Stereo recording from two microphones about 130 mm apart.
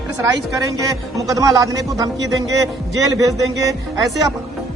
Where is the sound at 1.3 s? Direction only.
25° right (ahead or behind).